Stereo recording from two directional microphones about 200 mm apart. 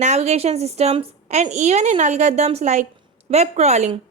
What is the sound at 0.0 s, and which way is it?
Speech, 35° right (ahead or behind).